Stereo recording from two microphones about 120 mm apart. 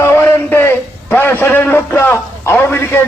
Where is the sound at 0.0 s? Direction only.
20° left (ahead or behind).